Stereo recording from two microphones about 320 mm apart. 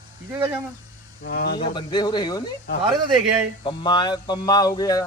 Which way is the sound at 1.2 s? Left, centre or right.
Left.